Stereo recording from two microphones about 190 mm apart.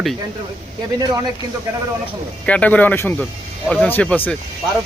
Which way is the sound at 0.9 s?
20° right (ahead or behind).